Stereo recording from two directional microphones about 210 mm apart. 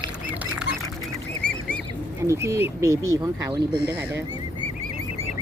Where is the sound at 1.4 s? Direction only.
5° left (ahead or behind).